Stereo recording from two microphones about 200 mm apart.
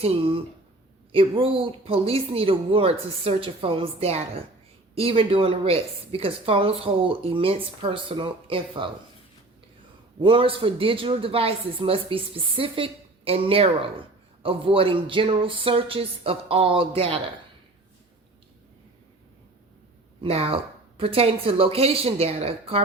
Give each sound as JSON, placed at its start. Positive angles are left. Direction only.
{"t": 0.0, "sound": "a woman's voice", "side_deg": -30}
{"t": 10.2, "sound": "a woman's voice", "side_deg": -25}
{"t": 20.2, "sound": "a woman's voice", "side_deg": -30}